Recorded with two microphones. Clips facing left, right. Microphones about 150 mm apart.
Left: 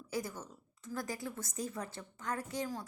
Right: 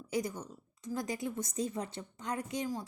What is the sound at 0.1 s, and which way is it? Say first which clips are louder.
A woman's voice: right 4 dB; 20° right (ahead or behind).